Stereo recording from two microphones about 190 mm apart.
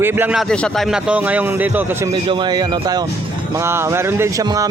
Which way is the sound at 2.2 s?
25° right (ahead or behind).